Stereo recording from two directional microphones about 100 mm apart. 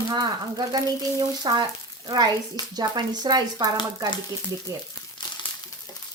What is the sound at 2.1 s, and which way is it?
Speech, 40° right (ahead or behind).